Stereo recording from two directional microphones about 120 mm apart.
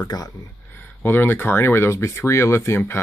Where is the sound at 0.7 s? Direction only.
15° left (ahead or behind).